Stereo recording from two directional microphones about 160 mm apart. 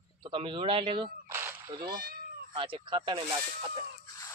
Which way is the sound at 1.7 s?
25° right (ahead or behind).